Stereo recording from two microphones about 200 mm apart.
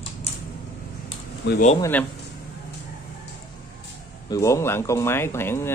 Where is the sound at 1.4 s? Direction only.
55° left (ahead or behind).